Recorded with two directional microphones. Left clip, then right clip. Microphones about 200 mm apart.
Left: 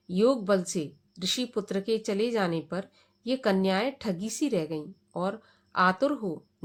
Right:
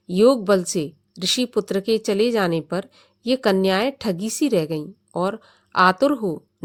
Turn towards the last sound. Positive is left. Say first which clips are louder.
# right 8 dB
turn(degrees=-40)  # may be behind; listen again after turning